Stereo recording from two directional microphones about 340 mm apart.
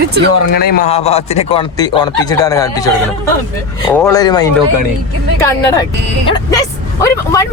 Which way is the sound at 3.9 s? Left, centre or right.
Centre.